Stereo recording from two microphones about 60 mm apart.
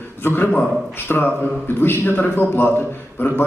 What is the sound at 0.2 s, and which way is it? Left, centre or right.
A man's voice, left.